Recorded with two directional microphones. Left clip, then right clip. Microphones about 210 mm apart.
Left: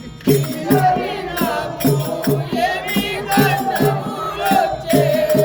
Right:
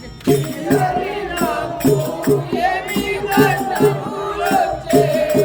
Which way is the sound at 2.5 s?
35° left (ahead or behind).